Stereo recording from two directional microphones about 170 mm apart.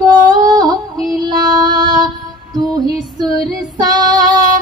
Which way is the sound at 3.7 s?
25° right (ahead or behind).